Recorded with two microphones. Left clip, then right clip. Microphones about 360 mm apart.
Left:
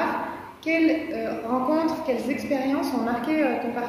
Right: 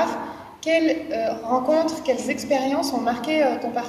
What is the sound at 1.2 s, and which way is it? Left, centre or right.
Speech, right.